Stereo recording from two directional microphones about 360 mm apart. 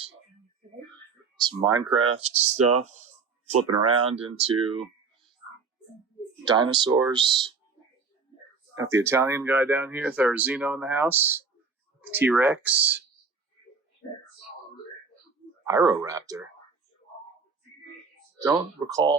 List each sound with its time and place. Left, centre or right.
1.4 s speech: centre
3.9 s speech: centre
6.4 s speech: centre
8.7 s speech: centre
15.6 s speech: centre
18.3 s speech: centre